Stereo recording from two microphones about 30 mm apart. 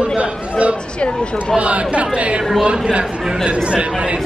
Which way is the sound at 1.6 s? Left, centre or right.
Right.